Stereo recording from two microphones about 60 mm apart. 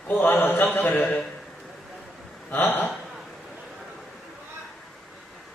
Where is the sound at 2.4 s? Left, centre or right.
Left.